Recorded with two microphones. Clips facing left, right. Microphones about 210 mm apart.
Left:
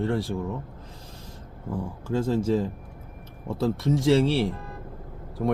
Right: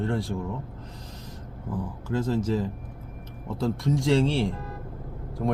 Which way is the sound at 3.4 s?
5° left (ahead or behind).